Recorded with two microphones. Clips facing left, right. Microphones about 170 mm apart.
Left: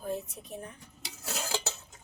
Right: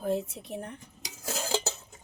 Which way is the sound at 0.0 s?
75° right (ahead or behind).